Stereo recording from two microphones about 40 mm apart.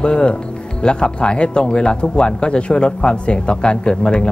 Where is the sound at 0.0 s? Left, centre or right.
Left.